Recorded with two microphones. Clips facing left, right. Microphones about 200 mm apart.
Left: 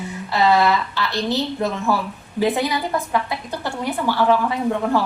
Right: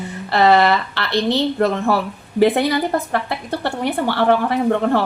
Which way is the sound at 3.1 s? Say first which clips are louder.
Right 2 dB; 65° right (ahead or behind).